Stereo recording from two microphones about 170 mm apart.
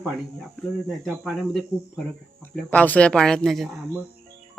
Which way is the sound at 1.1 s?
5° right (ahead or behind).